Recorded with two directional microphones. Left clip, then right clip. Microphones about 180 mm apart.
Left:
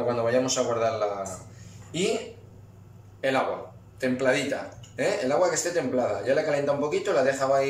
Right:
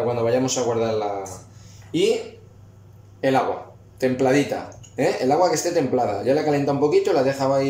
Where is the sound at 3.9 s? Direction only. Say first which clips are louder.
Right 5 dB; 35° right (ahead or behind).